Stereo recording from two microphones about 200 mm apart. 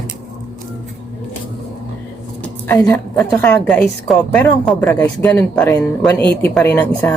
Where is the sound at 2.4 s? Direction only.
10° left (ahead or behind).